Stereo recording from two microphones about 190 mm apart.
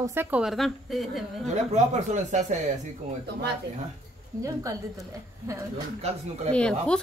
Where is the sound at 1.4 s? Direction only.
40° right (ahead or behind).